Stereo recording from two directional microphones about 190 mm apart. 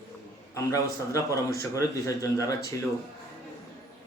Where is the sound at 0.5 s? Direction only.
15° left (ahead or behind).